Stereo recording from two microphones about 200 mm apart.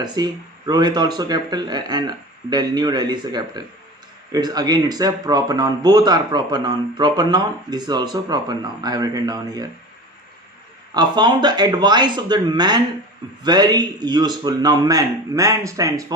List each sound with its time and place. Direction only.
0.0 s speech: 20° right (ahead or behind)
10.9 s speech: 20° right (ahead or behind)